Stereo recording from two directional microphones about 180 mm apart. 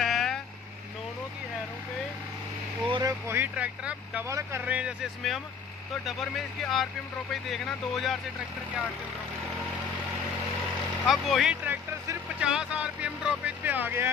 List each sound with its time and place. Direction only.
0.0 s vehicle: centre (ahead or behind)
2.9 s speech: 20° right (ahead or behind); by 8.2 s centre (ahead or behind)
11.1 s speech: centre (ahead or behind)